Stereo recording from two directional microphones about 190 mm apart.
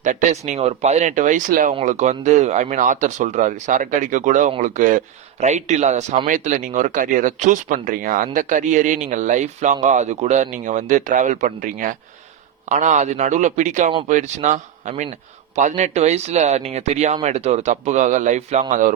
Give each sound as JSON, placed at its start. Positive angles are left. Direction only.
{"t": 0.0, "sound": "speech", "side_deg": -40}